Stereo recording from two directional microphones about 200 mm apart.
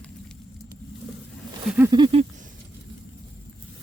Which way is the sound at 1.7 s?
15° right (ahead or behind).